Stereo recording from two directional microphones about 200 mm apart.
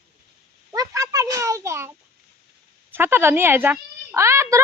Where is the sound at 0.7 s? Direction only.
15° right (ahead or behind).